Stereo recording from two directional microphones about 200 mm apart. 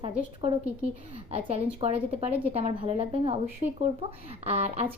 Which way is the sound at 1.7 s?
30° right (ahead or behind).